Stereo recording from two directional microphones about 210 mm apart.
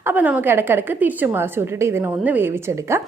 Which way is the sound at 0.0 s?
10° right (ahead or behind).